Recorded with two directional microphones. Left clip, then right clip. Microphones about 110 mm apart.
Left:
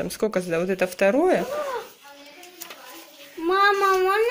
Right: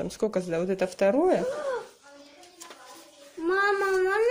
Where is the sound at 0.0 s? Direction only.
15° right (ahead or behind).